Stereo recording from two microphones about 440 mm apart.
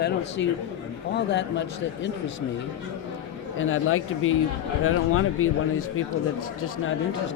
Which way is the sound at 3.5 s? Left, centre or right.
Left.